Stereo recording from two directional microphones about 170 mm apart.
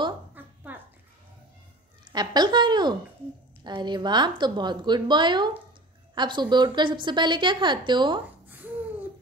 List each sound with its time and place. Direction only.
0.4 s dog: 10° right (ahead or behind)
2.1 s a woman's voice: 25° right (ahead or behind)